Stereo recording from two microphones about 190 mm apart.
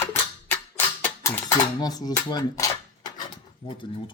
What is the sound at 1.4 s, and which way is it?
Rub, 20° left (ahead or behind).